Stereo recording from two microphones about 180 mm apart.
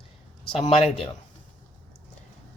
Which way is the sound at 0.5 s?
35° left (ahead or behind).